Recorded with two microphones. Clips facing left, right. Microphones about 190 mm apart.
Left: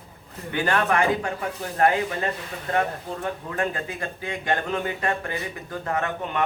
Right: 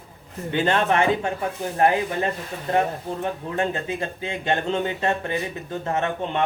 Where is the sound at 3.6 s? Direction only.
25° right (ahead or behind).